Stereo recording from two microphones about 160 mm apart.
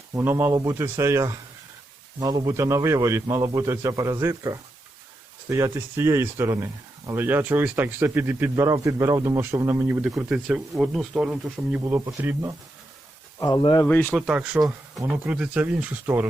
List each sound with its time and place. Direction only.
0.1 s a man's voice: 15° right (ahead or behind)
11.9 s a man's voice: 20° right (ahead or behind)
13.4 s speech: 30° left (ahead or behind)
13.8 s speech: 15° left (ahead or behind)
14.1 s speech: 5° right (ahead or behind)